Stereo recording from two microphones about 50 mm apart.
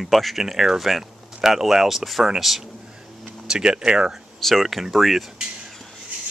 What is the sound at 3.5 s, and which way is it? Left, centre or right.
Speech, centre.